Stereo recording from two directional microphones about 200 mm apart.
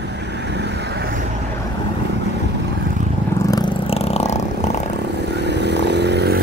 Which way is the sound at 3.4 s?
20° left (ahead or behind).